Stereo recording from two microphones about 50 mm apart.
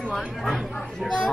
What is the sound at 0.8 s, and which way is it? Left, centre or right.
Speech, centre.